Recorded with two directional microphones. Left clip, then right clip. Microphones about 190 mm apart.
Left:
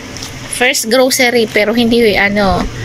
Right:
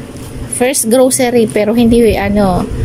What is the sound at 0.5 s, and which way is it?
A woman's voice, 20° right (ahead or behind).